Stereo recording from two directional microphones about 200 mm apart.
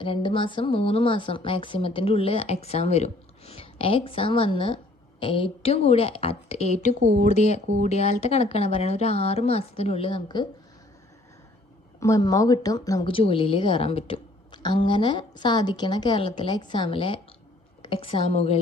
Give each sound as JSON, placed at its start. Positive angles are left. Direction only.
{"t": 0.0, "sound": "speech", "side_deg": 25}
{"t": 7.0, "sound": "speech", "side_deg": -60}
{"t": 7.3, "sound": "speech", "side_deg": 35}
{"t": 11.9, "sound": "speech", "side_deg": 15}